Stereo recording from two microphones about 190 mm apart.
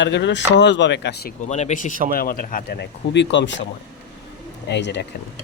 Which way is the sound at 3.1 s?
70° left (ahead or behind).